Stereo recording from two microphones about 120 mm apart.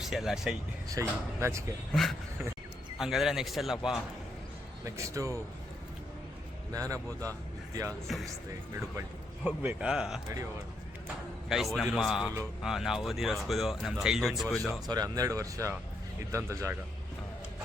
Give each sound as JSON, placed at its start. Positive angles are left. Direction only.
{"t": 0.0, "sound": "speech", "side_deg": -5}
{"t": 0.9, "sound": "speech", "side_deg": -25}
{"t": 1.9, "sound": "speech", "side_deg": 5}
{"t": 4.9, "sound": "speech", "side_deg": -25}
{"t": 6.7, "sound": "speech", "side_deg": -30}
{"t": 8.0, "sound": "speech", "side_deg": 0}
{"t": 9.4, "sound": "speech", "side_deg": -15}
{"t": 11.4, "sound": "speech", "side_deg": 0}
{"t": 14.8, "sound": "speech", "side_deg": -30}